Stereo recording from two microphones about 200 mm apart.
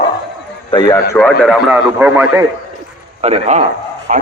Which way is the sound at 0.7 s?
20° left (ahead or behind).